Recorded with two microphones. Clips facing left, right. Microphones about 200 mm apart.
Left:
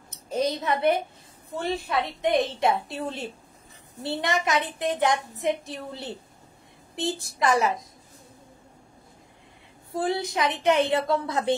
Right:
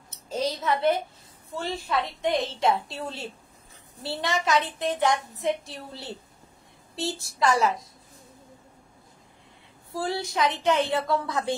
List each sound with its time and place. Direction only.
0.3 s a woman's voice: 20° left (ahead or behind)
10.0 s speech: 20° left (ahead or behind)